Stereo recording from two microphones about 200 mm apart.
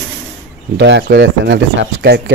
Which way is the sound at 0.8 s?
60° right (ahead or behind).